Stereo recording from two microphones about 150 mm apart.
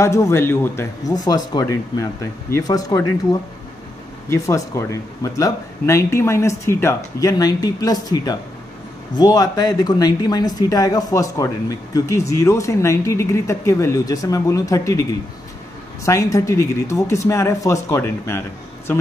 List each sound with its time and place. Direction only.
0.0 s speech: 20° left (ahead or behind)
16.1 s speech: 20° left (ahead or behind)